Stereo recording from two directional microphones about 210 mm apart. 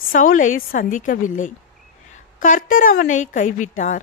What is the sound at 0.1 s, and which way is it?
A woman's voice, 40° left (ahead or behind).